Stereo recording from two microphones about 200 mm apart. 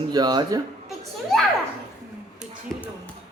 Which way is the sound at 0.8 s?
Centre (ahead or behind).